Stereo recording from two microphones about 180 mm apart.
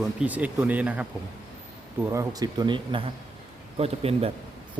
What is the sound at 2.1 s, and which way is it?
Speech, 20° right (ahead or behind).